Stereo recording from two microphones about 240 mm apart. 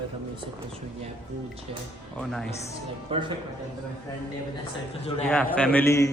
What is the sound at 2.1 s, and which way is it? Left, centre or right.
Speech, centre.